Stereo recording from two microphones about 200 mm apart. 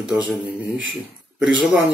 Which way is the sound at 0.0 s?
5° right (ahead or behind).